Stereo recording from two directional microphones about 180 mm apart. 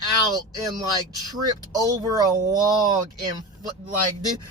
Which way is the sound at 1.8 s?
20° right (ahead or behind).